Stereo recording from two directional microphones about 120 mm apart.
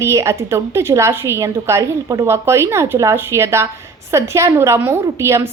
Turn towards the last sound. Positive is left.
turn(degrees=-20)  # may be behind; listen again after turning